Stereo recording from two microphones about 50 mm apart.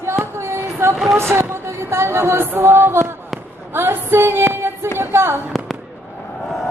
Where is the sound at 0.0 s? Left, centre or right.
Right.